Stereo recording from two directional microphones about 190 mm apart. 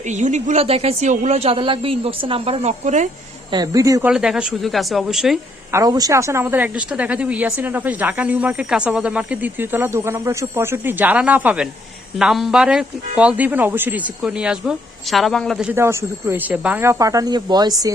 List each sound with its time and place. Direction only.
0.0 s speech: 40° right (ahead or behind)
3.5 s speech: 20° right (ahead or behind)
4.1 s speech: 5° right (ahead or behind)
5.7 s speech: 20° right (ahead or behind); by 15.6 s centre (ahead or behind)
15.7 s speech: 15° right (ahead or behind)